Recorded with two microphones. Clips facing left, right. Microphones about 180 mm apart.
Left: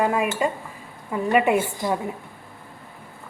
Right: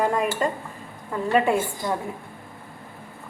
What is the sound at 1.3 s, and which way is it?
Speech, 20° left (ahead or behind).